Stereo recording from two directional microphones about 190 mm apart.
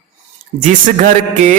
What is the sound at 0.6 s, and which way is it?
Speech, 45° right (ahead or behind).